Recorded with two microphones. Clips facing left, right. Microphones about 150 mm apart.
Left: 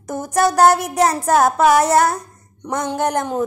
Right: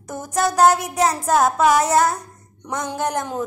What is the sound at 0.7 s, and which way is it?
A woman's voice, 60° left (ahead or behind).